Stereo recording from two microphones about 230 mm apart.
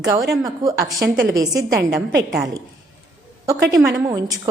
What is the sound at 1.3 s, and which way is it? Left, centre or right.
Speech, centre.